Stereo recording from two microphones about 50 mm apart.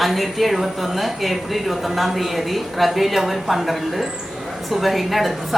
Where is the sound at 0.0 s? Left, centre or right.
Centre.